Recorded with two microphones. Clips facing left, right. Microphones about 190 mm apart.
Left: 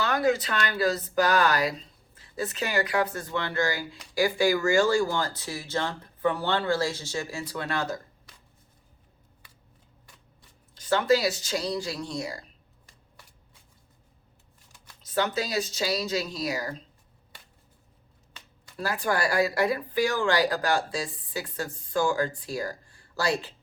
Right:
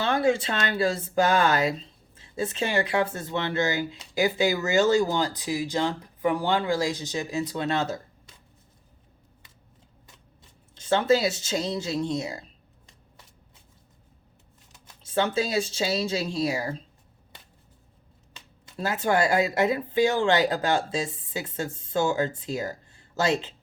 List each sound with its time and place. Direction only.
0.0 s speech: 25° right (ahead or behind)
10.8 s a sound: 25° right (ahead or behind)
14.7 s speech: 25° right (ahead or behind)
18.6 s speech: 20° right (ahead or behind)